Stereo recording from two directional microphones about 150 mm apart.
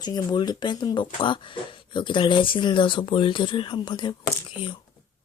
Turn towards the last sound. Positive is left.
turn(degrees=35)  # may be behind; listen again after turning